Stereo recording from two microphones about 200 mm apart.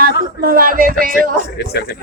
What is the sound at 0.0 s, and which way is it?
Speech, 45° right (ahead or behind).